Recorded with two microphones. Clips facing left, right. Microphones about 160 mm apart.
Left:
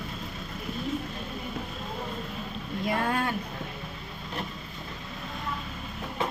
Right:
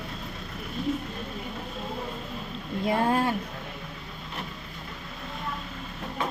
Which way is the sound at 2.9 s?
30° right (ahead or behind).